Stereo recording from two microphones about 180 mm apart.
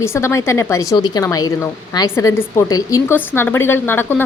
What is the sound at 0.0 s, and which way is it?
Speech, 15° left (ahead or behind).